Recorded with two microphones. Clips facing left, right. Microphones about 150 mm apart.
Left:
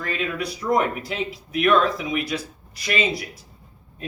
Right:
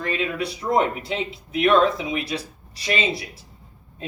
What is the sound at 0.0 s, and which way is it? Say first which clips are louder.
Speech: right 2 dB; 25° right (ahead or behind).